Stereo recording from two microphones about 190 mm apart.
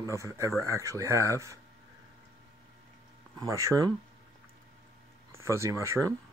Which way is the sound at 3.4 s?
15° right (ahead or behind).